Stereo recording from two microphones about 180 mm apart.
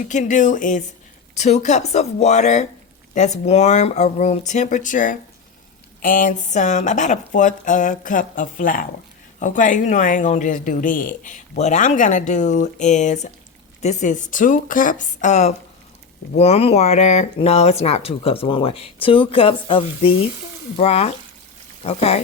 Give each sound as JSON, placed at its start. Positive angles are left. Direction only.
{"t": 0.1, "sound": "speech", "side_deg": 45}